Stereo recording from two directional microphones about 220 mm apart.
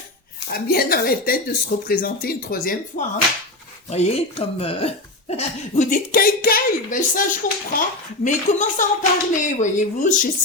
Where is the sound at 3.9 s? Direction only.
30° left (ahead or behind).